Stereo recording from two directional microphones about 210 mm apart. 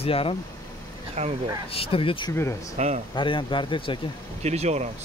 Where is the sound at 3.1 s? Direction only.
25° left (ahead or behind).